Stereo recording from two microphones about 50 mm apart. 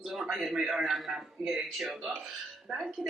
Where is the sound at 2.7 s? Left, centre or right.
Centre.